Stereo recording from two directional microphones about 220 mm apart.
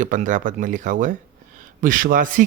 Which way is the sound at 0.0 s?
35° right (ahead or behind).